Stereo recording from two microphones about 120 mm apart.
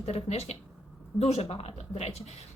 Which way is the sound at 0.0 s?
60° left (ahead or behind).